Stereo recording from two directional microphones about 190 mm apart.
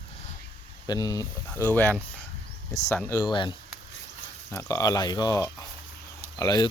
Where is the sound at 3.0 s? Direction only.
15° left (ahead or behind).